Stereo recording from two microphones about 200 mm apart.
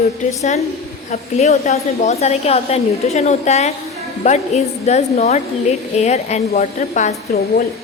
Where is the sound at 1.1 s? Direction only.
35° left (ahead or behind).